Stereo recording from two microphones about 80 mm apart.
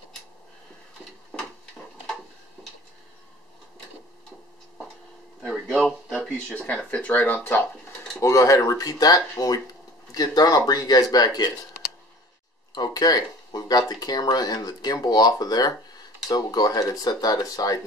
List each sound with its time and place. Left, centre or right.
5.7 s a sound: centre
6.1 s speech: centre
8.2 s speech: left
12.7 s speech: left